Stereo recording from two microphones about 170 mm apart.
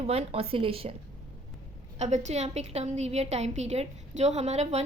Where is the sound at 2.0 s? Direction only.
40° right (ahead or behind).